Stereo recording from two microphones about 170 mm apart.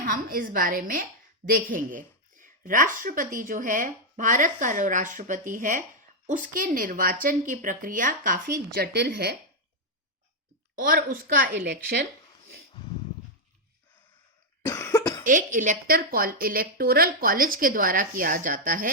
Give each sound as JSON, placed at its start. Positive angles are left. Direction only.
{"t": 0.0, "sound": "a woman's voice", "side_deg": -55}
{"t": 10.8, "sound": "a woman's voice", "side_deg": -55}
{"t": 14.7, "sound": "cough", "side_deg": 15}
{"t": 15.2, "sound": "a woman's voice", "side_deg": -50}